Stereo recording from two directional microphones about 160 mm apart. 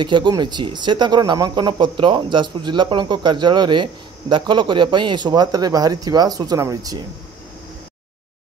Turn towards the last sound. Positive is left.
turn(degrees=-20)  # may be behind; listen again after turning